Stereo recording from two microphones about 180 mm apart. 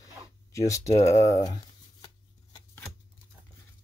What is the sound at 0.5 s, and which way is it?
Speech, 15° left (ahead or behind).